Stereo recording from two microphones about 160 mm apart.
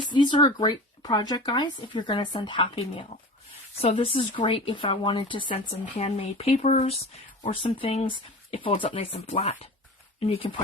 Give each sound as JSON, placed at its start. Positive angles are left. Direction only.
{"t": 0.1, "sound": "speech", "side_deg": 30}